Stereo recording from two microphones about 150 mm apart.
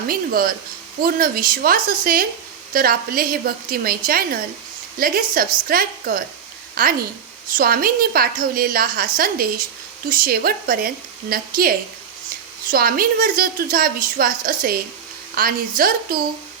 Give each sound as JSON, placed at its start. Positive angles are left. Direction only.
{"t": 0.1, "sound": "a woman's voice", "side_deg": -75}